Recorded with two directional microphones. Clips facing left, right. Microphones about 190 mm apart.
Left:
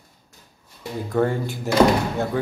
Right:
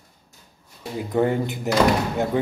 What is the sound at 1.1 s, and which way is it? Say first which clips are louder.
Speech: right 1 dB; 20° right (ahead or behind).